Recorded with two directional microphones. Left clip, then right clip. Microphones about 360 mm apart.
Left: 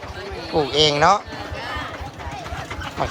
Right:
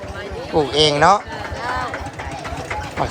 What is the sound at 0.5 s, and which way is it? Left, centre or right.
Speech, centre.